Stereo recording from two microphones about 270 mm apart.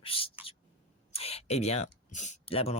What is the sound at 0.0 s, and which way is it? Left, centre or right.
Cat, centre.